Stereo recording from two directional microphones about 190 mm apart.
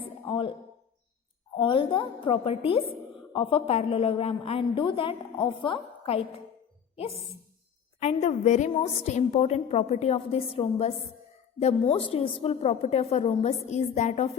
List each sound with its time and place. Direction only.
0.0 s a sound: 25° left (ahead or behind)
1.5 s a woman's voice: 25° left (ahead or behind)
7.9 s a woman's voice: 35° left (ahead or behind)